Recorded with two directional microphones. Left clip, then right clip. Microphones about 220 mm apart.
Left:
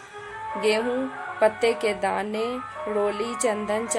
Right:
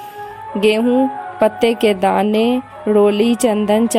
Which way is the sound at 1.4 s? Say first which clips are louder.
Right 7 dB; 40° right (ahead or behind).